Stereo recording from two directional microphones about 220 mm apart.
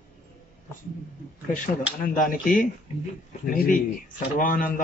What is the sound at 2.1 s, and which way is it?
Speech, 35° left (ahead or behind).